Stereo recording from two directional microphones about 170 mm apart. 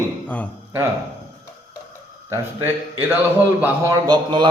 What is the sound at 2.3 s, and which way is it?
A man's voice, 15° right (ahead or behind).